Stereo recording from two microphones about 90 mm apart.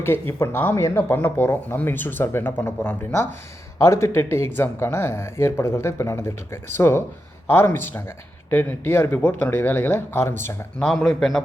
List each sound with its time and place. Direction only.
0.3 s speech: 25° left (ahead or behind)
10.8 s speech: 5° left (ahead or behind)